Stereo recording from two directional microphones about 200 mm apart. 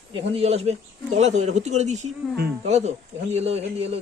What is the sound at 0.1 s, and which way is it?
A man's voice, 30° right (ahead or behind).